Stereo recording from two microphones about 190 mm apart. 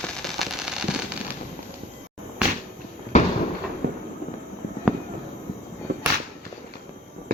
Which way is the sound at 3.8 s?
60° right (ahead or behind).